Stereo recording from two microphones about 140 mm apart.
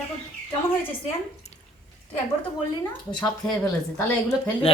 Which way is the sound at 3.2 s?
5° left (ahead or behind).